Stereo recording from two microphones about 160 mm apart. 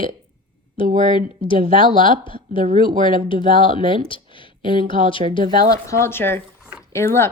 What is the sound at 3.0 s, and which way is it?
Speech, 30° left (ahead or behind).